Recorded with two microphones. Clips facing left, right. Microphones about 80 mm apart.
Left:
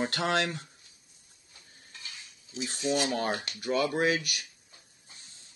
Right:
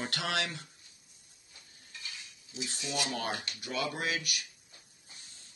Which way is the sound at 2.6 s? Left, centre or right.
Left.